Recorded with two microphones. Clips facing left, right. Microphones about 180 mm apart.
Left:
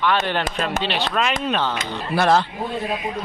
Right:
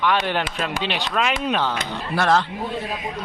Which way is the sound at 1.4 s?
10° right (ahead or behind).